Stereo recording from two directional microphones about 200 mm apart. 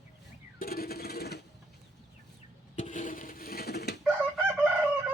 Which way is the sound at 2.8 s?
40° left (ahead or behind).